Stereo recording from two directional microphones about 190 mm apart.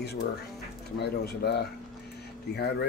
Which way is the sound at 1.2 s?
60° left (ahead or behind).